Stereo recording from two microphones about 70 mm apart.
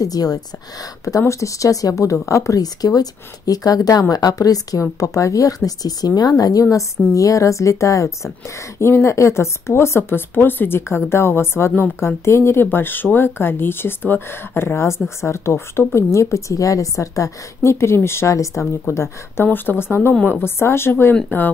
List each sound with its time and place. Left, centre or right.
0.0 s speech: left
1.0 s speech: left
7.2 s speech: left
18.9 s speech: left